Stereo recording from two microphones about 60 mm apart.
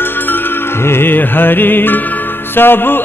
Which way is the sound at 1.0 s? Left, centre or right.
Left.